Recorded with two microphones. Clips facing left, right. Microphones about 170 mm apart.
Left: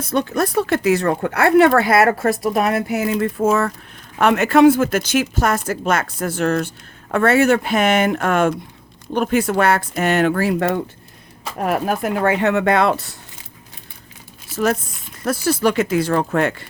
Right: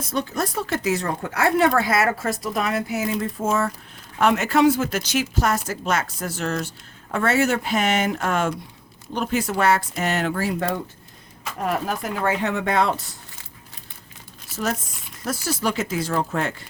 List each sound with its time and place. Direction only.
0.1 s speech: 60° left (ahead or behind)
14.5 s speech: 60° left (ahead or behind)